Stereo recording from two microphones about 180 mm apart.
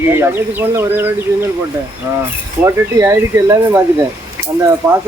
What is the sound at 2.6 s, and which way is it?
Speech, 15° right (ahead or behind).